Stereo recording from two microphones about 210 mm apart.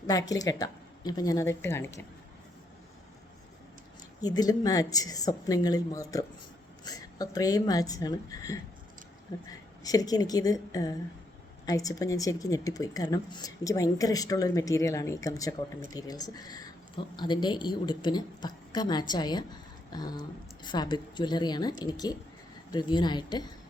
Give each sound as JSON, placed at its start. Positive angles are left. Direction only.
{"t": 0.1, "sound": "a woman's voice", "side_deg": 15}
{"t": 4.2, "sound": "a woman's voice", "side_deg": 20}